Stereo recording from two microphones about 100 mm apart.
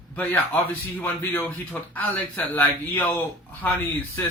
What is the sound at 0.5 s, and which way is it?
Speech, 15° left (ahead or behind).